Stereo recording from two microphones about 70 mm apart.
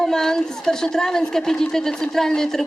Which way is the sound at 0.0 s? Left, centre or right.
Centre.